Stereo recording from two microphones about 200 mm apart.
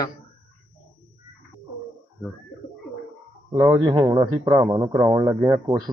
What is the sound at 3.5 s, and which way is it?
A man's voice, 20° right (ahead or behind).